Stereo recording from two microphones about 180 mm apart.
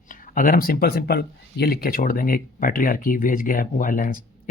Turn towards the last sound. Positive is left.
turn(degrees=50)  # may be behind; listen again after turning